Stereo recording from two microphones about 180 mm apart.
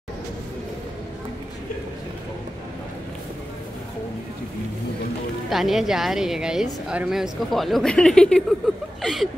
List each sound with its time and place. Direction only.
5.5 s a woman's voice: centre (ahead or behind)